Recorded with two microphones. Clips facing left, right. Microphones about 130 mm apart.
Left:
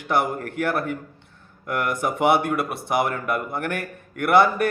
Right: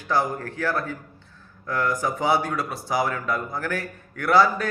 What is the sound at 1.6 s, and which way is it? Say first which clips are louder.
A man's voice: even; 60° left (ahead or behind).